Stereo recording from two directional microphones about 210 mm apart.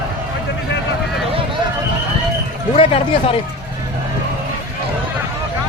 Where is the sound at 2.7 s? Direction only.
25° left (ahead or behind).